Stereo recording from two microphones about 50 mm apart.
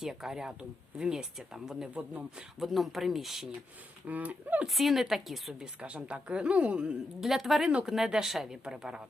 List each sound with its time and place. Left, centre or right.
0.0 s speech: centre
4.0 s speech: right
4.7 s speech: centre
5.5 s speech: right
7.2 s speech: centre